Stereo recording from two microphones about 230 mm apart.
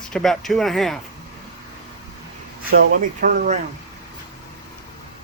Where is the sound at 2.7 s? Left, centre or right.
Right.